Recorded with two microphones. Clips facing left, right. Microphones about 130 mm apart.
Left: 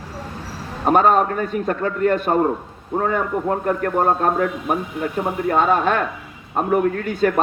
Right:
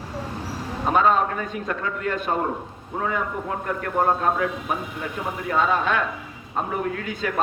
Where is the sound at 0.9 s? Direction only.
45° left (ahead or behind).